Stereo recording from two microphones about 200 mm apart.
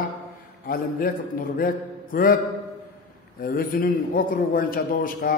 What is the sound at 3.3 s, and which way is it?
A man's voice, 45° left (ahead or behind).